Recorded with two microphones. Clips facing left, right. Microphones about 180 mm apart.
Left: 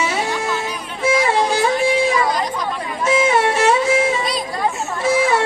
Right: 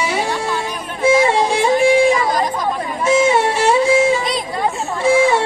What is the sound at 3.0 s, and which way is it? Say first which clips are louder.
Music: right 2 dB; 30° right (ahead or behind).